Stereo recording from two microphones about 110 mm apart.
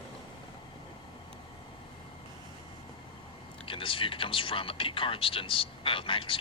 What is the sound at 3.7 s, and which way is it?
Speech, 55° left (ahead or behind).